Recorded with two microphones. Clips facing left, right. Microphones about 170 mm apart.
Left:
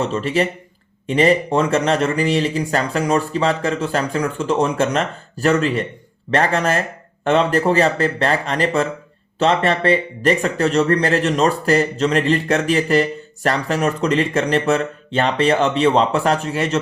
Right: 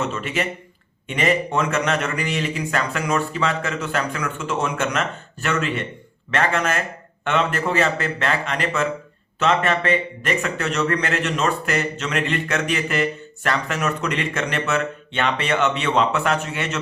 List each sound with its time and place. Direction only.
0.0 s speech: 35° left (ahead or behind)